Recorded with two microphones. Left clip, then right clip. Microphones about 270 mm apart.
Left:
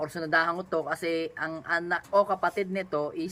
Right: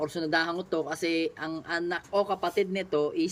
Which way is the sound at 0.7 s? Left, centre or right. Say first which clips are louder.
Even; left.